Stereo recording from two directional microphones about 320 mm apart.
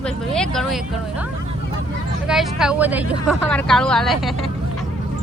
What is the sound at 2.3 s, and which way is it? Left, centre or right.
Speech, centre.